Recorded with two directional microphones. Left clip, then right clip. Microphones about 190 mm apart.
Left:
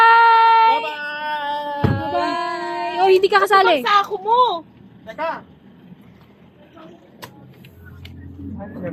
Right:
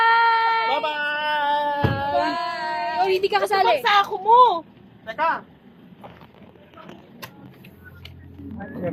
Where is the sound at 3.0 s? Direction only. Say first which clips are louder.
Left 8 dB; 70° left (ahead or behind).